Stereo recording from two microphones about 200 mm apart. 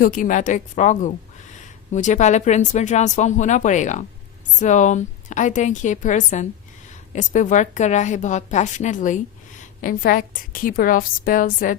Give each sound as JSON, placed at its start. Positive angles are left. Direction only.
{"t": 0.0, "sound": "a woman's voice", "side_deg": 45}